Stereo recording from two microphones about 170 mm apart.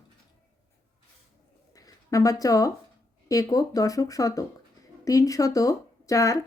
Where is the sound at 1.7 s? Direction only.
20° left (ahead or behind).